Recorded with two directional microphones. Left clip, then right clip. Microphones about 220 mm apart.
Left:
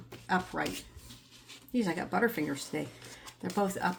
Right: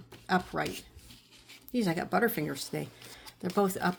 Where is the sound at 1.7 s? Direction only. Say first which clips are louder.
Right 2 dB; 45° right (ahead or behind).